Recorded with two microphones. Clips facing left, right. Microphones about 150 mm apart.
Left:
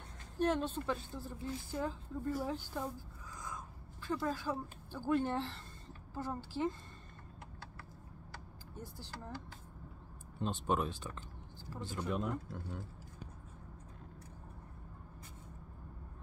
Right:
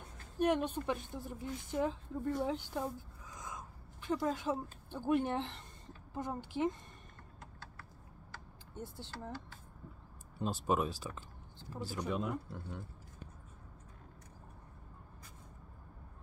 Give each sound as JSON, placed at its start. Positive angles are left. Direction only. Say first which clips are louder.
{"t": 0.4, "sound": "a woman's voice", "louder": "right 2 dB", "side_deg": -15}
{"t": 8.7, "sound": "speech", "louder": "right 3 dB", "side_deg": -25}
{"t": 10.4, "sound": "speech", "louder": "right 1 dB", "side_deg": -5}